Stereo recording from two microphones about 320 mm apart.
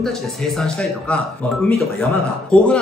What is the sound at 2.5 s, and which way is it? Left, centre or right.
Speech, centre.